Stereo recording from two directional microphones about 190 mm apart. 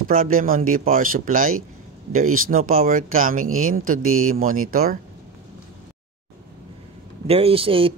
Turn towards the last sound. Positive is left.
turn(degrees=-30)  # may be behind; listen again after turning